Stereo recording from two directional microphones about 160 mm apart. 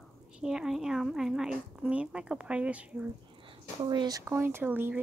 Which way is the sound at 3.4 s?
25° right (ahead or behind).